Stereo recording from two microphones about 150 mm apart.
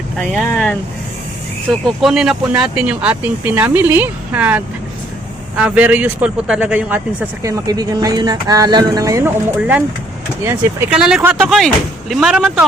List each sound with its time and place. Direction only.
0.2 s speech: 5° left (ahead or behind)
2.0 s speech: 5° right (ahead or behind)
7.4 s speech: 25° right (ahead or behind)
9.6 s speech: 10° right (ahead or behind)
10.9 s speech: 5° right (ahead or behind)
11.4 s speech: centre (ahead or behind)